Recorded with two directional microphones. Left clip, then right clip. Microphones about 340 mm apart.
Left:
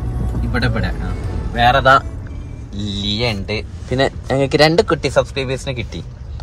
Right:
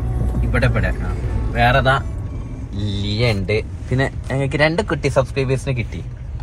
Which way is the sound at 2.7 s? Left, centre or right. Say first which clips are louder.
Left 5 dB; centre.